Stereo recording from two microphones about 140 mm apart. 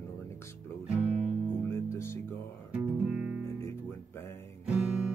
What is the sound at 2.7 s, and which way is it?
Music, 10° right (ahead or behind).